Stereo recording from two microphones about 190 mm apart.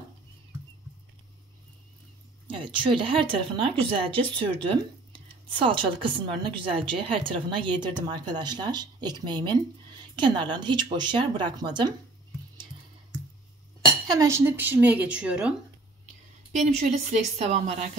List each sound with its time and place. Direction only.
2.4 s speech: 25° right (ahead or behind)
14.1 s a woman's voice: 15° right (ahead or behind)
16.5 s a woman's voice: 40° right (ahead or behind)